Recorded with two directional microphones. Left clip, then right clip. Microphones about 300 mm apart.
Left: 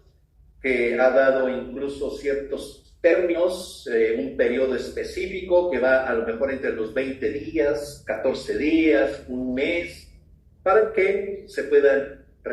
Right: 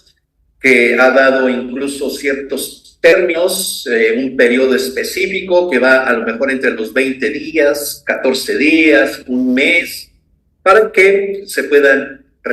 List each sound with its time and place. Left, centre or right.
0.6 s a man's voice: right